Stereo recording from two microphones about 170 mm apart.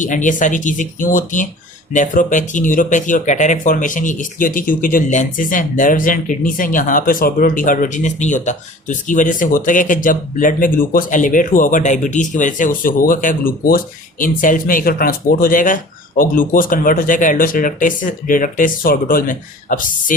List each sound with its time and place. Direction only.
0.0 s speech: 50° left (ahead or behind)